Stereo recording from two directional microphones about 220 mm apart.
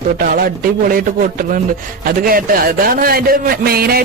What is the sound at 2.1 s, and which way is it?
A man's voice, 40° right (ahead or behind).